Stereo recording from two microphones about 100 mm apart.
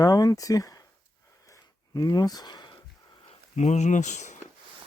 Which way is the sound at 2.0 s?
40° left (ahead or behind).